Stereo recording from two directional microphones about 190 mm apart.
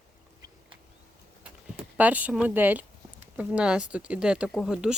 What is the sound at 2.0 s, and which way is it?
Speech, 10° right (ahead or behind).